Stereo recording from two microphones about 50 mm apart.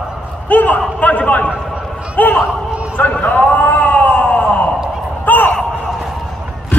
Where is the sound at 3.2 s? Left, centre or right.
Left.